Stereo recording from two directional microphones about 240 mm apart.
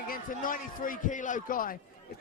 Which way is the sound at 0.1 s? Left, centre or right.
Left.